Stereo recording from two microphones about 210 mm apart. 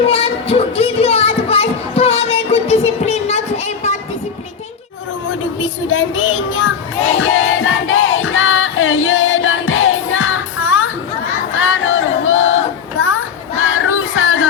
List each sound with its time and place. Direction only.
0.0 s music: 30° left (ahead or behind)
5.3 s speech: 70° left (ahead or behind)
7.2 s music: 70° left (ahead or behind)
11.5 s a sound: 70° left (ahead or behind)
13.0 s child singing: 75° left (ahead or behind)